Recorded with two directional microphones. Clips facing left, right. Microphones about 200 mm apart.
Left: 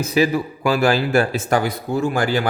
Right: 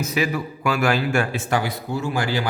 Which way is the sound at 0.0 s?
30° left (ahead or behind).